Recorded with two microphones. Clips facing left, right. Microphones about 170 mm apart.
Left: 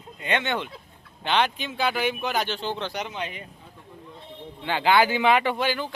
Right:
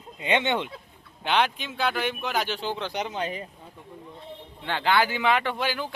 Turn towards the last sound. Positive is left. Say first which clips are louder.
# left 3 dB
turn(degrees=-5)  # may be behind; listen again after turning